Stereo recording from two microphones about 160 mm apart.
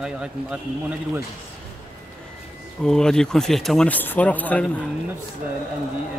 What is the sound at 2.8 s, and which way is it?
A man's voice, 5° left (ahead or behind).